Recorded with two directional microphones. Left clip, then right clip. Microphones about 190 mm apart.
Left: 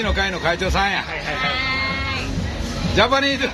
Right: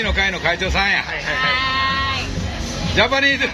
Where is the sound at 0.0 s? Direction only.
10° left (ahead or behind).